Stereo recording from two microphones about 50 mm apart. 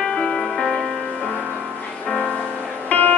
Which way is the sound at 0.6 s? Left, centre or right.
Centre.